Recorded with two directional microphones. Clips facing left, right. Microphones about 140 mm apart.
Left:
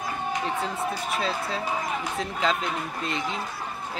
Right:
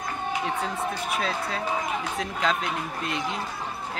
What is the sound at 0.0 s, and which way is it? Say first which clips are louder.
Speech: even; centre (ahead or behind).